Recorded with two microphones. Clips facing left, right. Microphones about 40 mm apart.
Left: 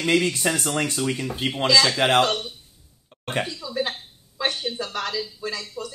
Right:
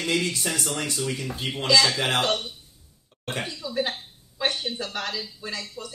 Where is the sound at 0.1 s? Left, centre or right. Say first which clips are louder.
Left 5 dB; left.